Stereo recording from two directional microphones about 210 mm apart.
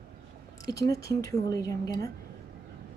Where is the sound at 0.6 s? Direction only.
15° left (ahead or behind).